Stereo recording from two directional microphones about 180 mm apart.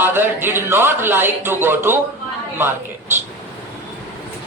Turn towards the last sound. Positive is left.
turn(degrees=-10)  # may be behind; listen again after turning